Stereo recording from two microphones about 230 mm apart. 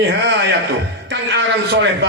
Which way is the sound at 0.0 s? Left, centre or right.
Right.